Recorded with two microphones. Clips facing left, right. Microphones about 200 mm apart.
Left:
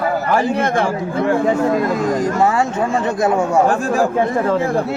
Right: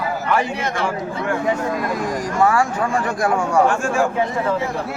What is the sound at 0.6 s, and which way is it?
Speech, 55° left (ahead or behind).